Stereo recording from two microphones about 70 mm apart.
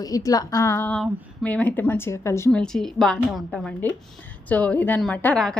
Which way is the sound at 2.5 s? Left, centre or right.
Centre.